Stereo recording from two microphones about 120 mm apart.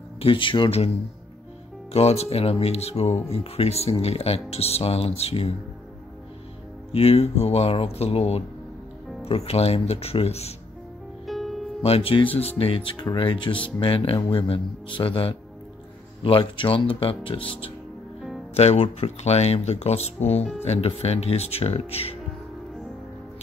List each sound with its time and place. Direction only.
0.2 s speech: 45° left (ahead or behind)
6.9 s speech: 55° left (ahead or behind)
11.2 s music: centre (ahead or behind)
11.8 s speech: 55° left (ahead or behind)
18.5 s speech: 60° left (ahead or behind)